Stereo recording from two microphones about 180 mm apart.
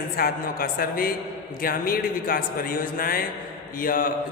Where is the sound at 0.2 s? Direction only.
55° left (ahead or behind).